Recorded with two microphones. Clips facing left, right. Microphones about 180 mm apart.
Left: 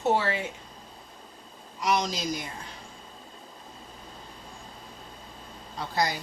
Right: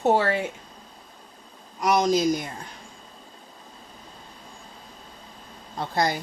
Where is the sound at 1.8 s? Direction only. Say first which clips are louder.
Right 7 dB; 50° right (ahead or behind).